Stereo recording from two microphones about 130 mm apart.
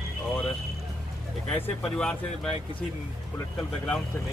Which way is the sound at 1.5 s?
10° left (ahead or behind).